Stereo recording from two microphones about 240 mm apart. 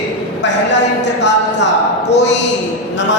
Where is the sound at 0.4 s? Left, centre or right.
Left.